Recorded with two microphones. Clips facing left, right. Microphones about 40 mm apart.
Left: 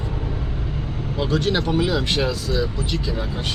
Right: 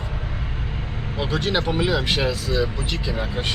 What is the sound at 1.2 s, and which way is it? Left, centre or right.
Speech, centre.